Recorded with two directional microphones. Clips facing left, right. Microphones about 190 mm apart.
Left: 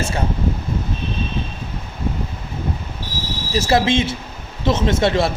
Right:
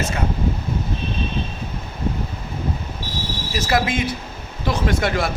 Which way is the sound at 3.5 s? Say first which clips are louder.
Left 5 dB; 25° left (ahead or behind).